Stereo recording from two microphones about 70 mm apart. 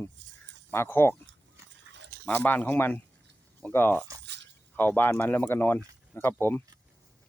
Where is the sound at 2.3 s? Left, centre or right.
Left.